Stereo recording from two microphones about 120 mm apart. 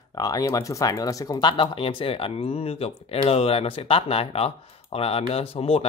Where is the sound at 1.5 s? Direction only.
50° left (ahead or behind).